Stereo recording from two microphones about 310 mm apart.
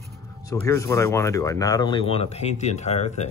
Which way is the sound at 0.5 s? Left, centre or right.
Centre.